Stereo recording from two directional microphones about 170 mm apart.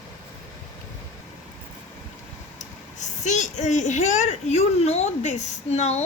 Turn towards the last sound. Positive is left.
turn(degrees=40)  # may be behind; listen again after turning